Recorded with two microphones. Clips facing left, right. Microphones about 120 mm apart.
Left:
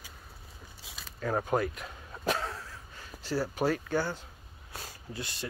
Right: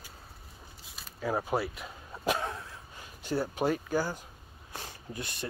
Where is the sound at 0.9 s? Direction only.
90° left.